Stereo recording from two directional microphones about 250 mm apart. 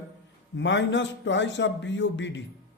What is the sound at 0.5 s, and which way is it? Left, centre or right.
A man's voice, left.